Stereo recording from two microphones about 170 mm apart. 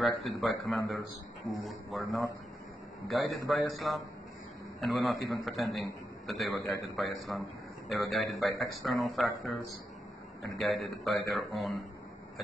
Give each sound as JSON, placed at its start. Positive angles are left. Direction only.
{"t": 0.0, "sound": "a man's voice", "side_deg": 0}
{"t": 10.4, "sound": "a man's voice", "side_deg": 0}